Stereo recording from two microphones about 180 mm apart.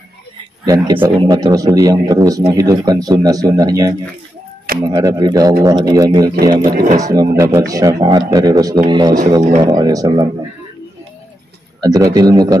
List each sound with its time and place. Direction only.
1.2 s speech: 20° right (ahead or behind)
6.7 s speech: 55° right (ahead or behind)
7.0 s speech: 20° right (ahead or behind)
11.8 s speech: 20° right (ahead or behind)